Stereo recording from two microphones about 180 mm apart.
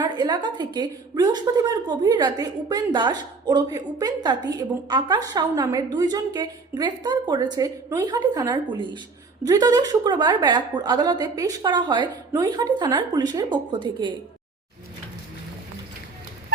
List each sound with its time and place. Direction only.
0.0 s a woman's voice: 25° right (ahead or behind)